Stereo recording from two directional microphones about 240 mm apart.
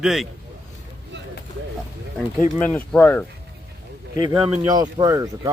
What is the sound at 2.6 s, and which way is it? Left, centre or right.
Speech, centre.